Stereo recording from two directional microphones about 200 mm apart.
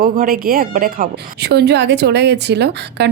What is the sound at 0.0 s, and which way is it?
A woman's voice, 45° right (ahead or behind).